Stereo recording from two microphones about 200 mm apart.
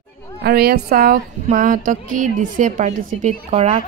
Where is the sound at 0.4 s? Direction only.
50° right (ahead or behind).